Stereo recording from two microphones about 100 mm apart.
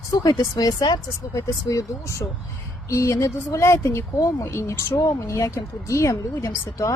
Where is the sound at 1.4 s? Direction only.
30° left (ahead or behind).